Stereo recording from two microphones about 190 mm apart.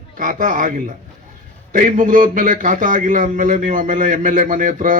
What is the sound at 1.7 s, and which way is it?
A man's voice, 45° right (ahead or behind).